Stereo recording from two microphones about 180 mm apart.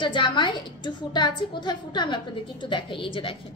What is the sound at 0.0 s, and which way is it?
A woman's voice, 25° left (ahead or behind).